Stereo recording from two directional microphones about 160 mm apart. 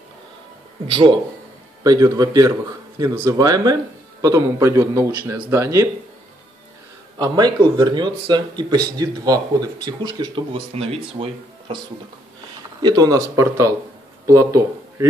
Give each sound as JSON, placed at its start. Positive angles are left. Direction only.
{"t": 0.8, "sound": "a man's voice", "side_deg": -30}
{"t": 7.2, "sound": "speech", "side_deg": -25}
{"t": 12.8, "sound": "speech", "side_deg": -25}